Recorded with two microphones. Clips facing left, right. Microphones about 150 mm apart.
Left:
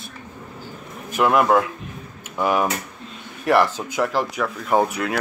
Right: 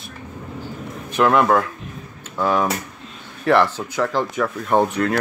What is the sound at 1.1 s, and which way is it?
Speech, 5° left (ahead or behind).